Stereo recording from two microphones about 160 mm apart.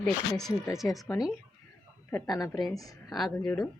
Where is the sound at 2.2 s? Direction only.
25° left (ahead or behind).